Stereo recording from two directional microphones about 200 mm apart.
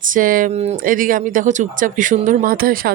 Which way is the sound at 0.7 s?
45° right (ahead or behind).